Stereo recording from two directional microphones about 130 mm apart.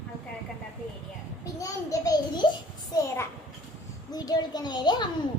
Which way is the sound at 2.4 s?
35° left (ahead or behind).